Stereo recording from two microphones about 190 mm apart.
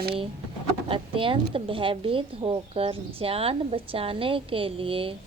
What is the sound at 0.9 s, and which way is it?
A woman's voice, 25° right (ahead or behind).